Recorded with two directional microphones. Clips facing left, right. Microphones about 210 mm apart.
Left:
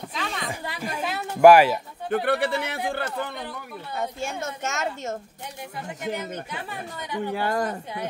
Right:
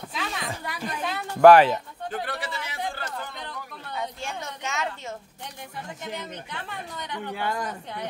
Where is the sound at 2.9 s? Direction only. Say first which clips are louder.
Left 6 dB; 60° left (ahead or behind).